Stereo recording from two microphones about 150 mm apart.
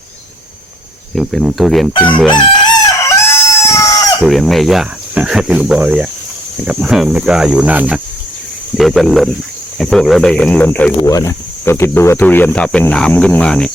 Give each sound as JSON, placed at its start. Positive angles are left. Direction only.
{"t": 1.1, "sound": "cricket", "side_deg": 0}
{"t": 1.9, "sound": "crowing", "side_deg": 35}
{"t": 3.0, "sound": "chicken", "side_deg": 20}
{"t": 4.2, "sound": "cricket", "side_deg": 0}
{"t": 11.0, "sound": "speech", "side_deg": 20}